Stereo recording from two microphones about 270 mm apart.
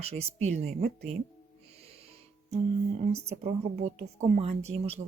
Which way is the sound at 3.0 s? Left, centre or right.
Right.